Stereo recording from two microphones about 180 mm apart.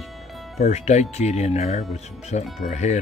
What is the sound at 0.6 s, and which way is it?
Speech, 40° left (ahead or behind).